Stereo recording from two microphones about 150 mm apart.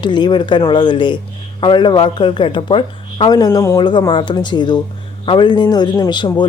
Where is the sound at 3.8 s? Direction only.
30° left (ahead or behind).